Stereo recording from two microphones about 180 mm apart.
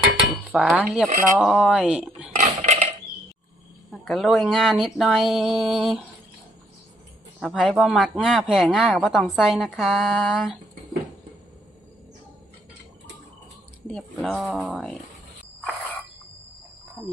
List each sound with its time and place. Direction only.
0.4 s cutlery: centre (ahead or behind)
0.9 s speech: centre (ahead or behind)
2.3 s dishes: 40° right (ahead or behind)
4.0 s speech: centre (ahead or behind)
7.3 s speech: centre (ahead or behind)
13.8 s speech: centre (ahead or behind)